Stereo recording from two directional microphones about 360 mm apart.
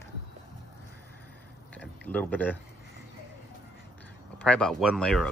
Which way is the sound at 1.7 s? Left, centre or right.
Centre.